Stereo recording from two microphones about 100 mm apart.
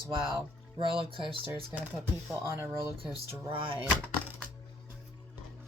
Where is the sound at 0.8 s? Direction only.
60° right (ahead or behind).